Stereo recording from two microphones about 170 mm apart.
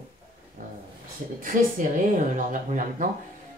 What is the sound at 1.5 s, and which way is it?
A woman's voice, 55° right (ahead or behind).